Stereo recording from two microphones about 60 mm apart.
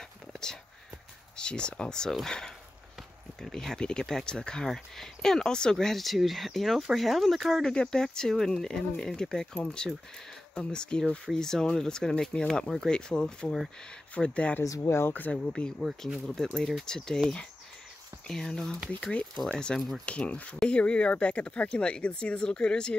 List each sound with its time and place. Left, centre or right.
1.3 s speech: centre
7.7 s speech: centre
14.6 s speech: left
15.1 s speech: left; by 18.8 s centre
18.9 s speech: centre